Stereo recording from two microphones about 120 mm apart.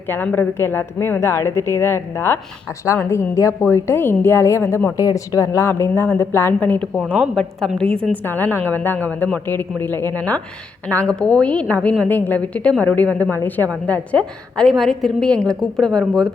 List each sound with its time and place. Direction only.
0.1 s a woman's voice: 15° left (ahead or behind)
7.2 s a woman's voice: centre (ahead or behind)